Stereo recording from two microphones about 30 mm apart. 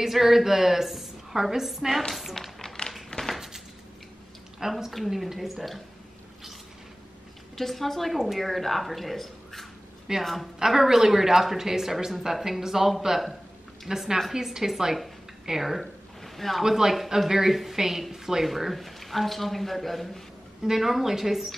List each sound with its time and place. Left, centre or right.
0.0 s speech: centre
2.4 s speech: centre
2.8 s a sound: left
4.6 s a man's voice: centre
7.5 s a man's voice: centre
10.7 s speech: centre
16.6 s speech: centre
18.5 s a man's voice: centre
20.6 s speech: centre